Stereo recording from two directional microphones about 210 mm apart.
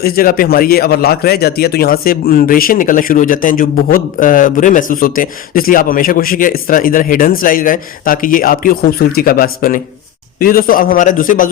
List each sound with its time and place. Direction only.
0.0 s a man's voice: 45° left (ahead or behind)